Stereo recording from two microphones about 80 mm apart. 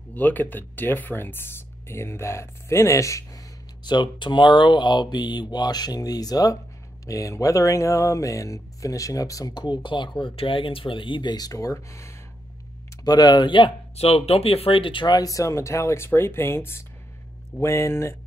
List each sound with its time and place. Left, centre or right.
0.1 s speech: left
3.8 s speech: left
9.8 s speech: left
11.3 s speech: left
13.0 s speech: left
14.8 s speech: left
15.1 s speech: left